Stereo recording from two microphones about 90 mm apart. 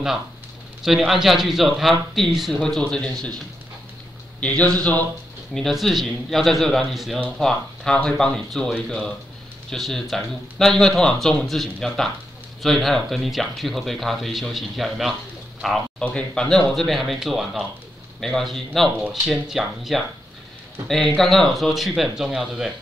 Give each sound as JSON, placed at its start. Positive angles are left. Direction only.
{"t": 0.8, "sound": "speech", "side_deg": 0}
{"t": 4.4, "sound": "a man's voice", "side_deg": 15}
{"t": 5.5, "sound": "speech", "side_deg": 5}